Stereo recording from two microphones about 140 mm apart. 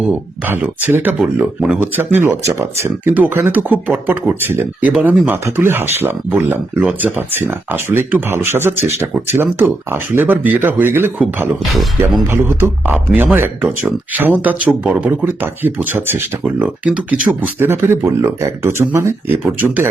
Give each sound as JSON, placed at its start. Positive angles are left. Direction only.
{"t": 0.1, "sound": "speech", "side_deg": -15}
{"t": 11.7, "sound": "speech", "side_deg": 0}
{"t": 12.3, "sound": "speech", "side_deg": -15}